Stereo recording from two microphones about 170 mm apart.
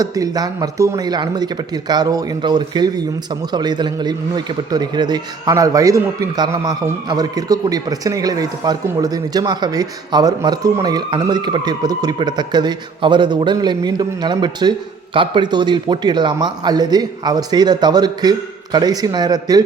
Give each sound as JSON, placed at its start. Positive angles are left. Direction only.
{"t": 0.0, "sound": "a man's voice", "side_deg": -20}